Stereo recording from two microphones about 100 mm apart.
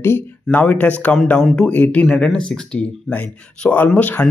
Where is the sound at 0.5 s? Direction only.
15° left (ahead or behind).